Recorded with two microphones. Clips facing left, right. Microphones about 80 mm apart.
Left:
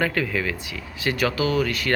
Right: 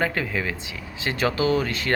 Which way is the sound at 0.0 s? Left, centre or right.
Right.